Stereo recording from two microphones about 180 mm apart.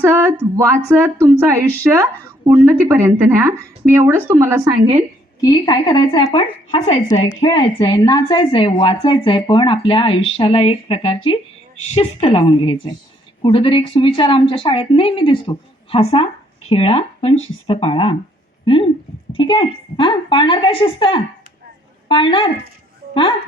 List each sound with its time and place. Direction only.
0.0 s speech: 15° right (ahead or behind)
5.4 s a woman's voice: 20° left (ahead or behind)
19.3 s a woman's voice: 25° left (ahead or behind)